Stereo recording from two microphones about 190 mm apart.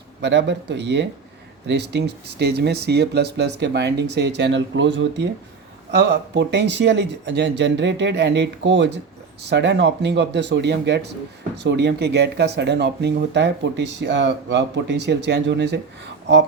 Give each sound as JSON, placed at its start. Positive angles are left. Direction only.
{"t": 0.2, "sound": "speech", "side_deg": -65}